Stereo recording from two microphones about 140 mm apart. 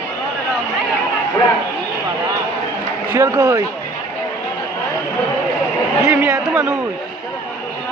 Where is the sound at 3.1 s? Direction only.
20° right (ahead or behind).